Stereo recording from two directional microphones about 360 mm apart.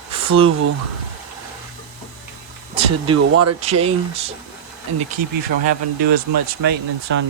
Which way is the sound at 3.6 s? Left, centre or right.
Centre.